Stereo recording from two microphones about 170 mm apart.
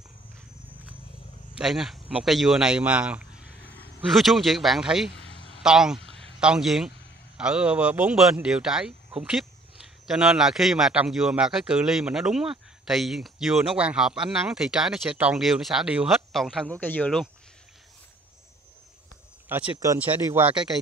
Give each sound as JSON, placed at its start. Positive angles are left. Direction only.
{"t": 1.5, "sound": "speech", "side_deg": -5}
{"t": 5.1, "sound": "a sound", "side_deg": 90}
{"t": 5.6, "sound": "speech", "side_deg": -5}
{"t": 19.5, "sound": "speech", "side_deg": -5}